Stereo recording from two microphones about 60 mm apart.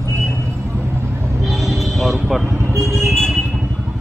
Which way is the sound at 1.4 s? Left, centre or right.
Centre.